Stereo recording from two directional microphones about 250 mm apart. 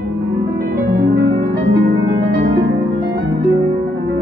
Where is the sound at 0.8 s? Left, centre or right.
Right.